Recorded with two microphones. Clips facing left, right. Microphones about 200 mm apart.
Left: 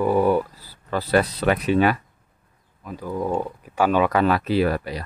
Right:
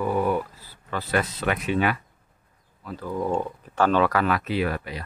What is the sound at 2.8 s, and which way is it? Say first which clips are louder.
Speech: left 1 dB; 15° left (ahead or behind).